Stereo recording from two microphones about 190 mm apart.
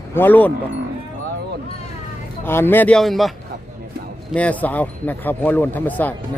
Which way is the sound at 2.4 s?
10° left (ahead or behind).